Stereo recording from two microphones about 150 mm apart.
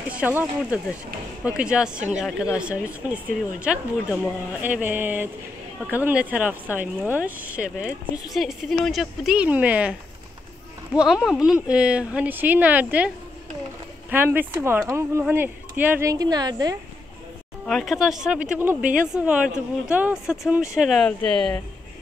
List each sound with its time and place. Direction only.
0.1 s speech: 10° right (ahead or behind)
11.0 s speech: 5° right (ahead or behind)
14.1 s speech: 15° right (ahead or behind)
17.6 s speech: centre (ahead or behind)